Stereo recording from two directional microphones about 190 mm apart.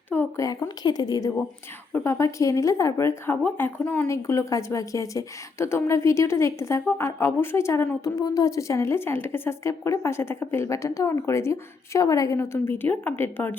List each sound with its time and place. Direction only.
0.1 s speech: 10° left (ahead or behind)